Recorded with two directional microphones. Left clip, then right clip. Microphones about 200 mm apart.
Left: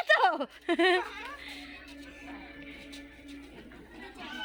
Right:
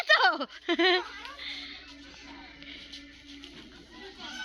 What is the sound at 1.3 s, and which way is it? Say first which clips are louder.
Music: right 4 dB; centre (ahead or behind).